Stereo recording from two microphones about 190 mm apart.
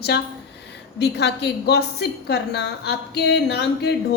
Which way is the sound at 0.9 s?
65° left (ahead or behind).